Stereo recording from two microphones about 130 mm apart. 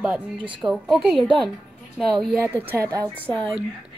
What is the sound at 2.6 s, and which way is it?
Speech, 20° right (ahead or behind).